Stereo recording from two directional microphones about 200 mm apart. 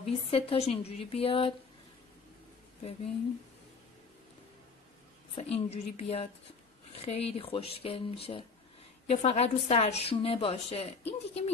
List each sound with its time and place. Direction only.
0.0 s a woman's voice: 30° left (ahead or behind)
5.4 s a woman's voice: 30° left (ahead or behind)